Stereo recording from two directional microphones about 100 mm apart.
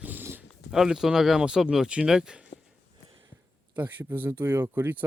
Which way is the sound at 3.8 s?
20° right (ahead or behind).